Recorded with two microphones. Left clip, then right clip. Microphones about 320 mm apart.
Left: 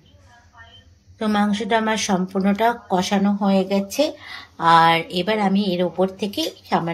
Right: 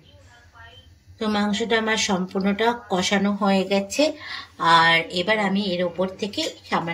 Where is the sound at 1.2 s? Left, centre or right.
Centre.